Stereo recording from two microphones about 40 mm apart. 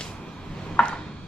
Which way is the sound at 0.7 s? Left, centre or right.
Left.